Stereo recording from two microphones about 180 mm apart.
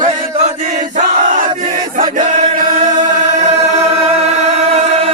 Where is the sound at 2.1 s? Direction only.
45° right (ahead or behind).